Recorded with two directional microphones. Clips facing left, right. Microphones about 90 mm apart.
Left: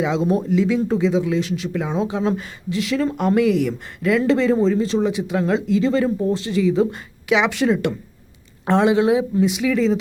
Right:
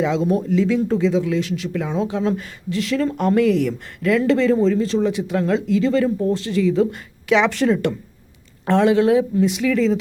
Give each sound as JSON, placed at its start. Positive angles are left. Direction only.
{"t": 0.0, "sound": "speech", "side_deg": 20}
{"t": 0.5, "sound": "speech", "side_deg": 10}